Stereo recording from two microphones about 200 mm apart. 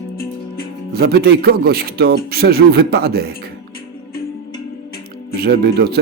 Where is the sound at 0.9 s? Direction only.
55° right (ahead or behind).